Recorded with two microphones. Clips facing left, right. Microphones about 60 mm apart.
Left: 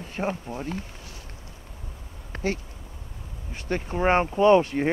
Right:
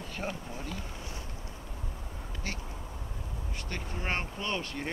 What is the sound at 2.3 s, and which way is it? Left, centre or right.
Bee, left.